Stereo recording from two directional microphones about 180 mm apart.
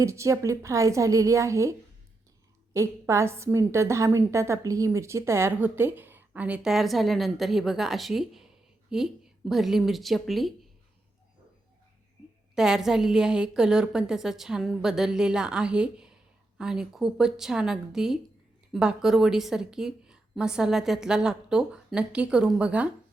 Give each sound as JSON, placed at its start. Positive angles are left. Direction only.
{"t": 0.0, "sound": "a woman's voice", "side_deg": -15}
{"t": 2.7, "sound": "a woman's voice", "side_deg": -15}
{"t": 12.5, "sound": "a woman's voice", "side_deg": -5}